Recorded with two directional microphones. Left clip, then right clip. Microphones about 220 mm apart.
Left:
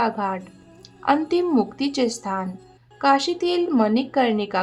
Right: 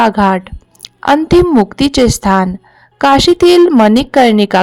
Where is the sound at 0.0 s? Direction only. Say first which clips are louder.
Right 13 dB; 45° right (ahead or behind).